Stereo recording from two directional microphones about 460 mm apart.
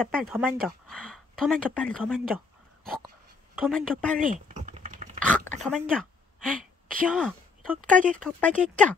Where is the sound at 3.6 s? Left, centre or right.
Centre.